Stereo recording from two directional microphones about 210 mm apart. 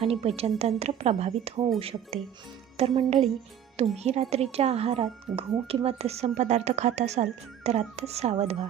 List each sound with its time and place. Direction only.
0.1 s a woman's voice: 30° right (ahead or behind)